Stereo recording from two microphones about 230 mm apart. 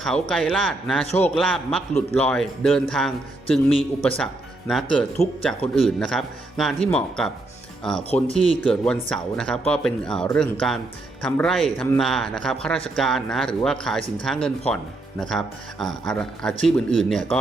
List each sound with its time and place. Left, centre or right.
0.0 s speech: centre
4.7 s speech: centre
8.3 s speech: left
8.7 s speech: centre